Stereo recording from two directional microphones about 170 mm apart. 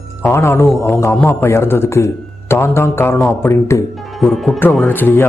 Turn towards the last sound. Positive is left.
turn(degrees=10)  # may be behind; listen again after turning